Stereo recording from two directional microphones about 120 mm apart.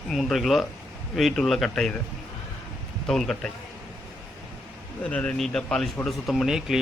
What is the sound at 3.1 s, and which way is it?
Speech, 5° left (ahead or behind).